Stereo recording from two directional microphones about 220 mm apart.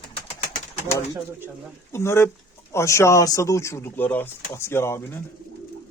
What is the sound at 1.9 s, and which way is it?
Speech, 10° left (ahead or behind).